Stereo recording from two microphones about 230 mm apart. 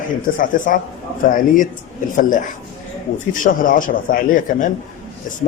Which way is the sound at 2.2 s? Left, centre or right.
Left.